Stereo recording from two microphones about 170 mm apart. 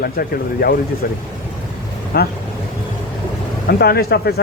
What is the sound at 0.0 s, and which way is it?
Speech, 60° left (ahead or behind).